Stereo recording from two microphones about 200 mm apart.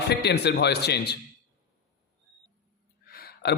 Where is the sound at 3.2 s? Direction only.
50° left (ahead or behind).